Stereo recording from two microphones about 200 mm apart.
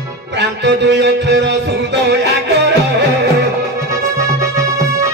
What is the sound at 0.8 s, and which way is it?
Music, 60° right (ahead or behind).